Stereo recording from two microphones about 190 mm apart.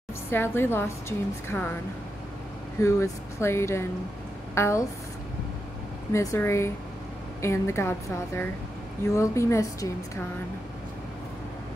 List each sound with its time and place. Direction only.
0.3 s a woman's voice: 10° left (ahead or behind)
2.8 s a woman's voice: 15° left (ahead or behind)
6.1 s a woman's voice: 15° left (ahead or behind)
9.1 s a woman's voice: 15° left (ahead or behind)